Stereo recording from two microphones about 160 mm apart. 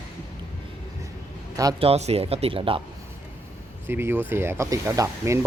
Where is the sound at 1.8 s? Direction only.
40° right (ahead or behind).